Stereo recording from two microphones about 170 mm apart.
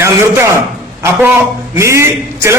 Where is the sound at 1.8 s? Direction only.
15° right (ahead or behind).